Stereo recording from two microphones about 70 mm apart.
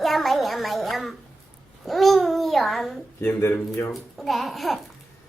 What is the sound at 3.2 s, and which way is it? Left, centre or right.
Speech, left.